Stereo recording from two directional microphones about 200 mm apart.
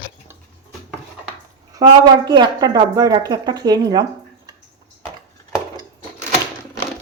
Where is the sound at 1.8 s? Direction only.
20° right (ahead or behind).